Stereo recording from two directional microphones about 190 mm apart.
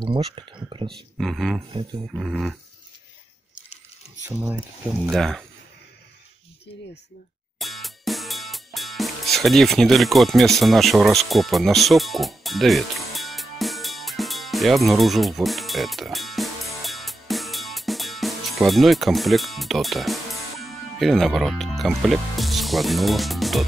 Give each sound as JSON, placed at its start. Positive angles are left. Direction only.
{"t": 0.0, "sound": "speech", "side_deg": -25}
{"t": 0.8, "sound": "speech", "side_deg": 0}
{"t": 4.3, "sound": "speech", "side_deg": -10}
{"t": 5.1, "sound": "speech", "side_deg": 0}
{"t": 7.6, "sound": "music", "side_deg": 0}